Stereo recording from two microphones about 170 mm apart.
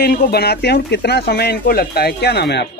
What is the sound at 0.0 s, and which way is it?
Speech, 65° left (ahead or behind).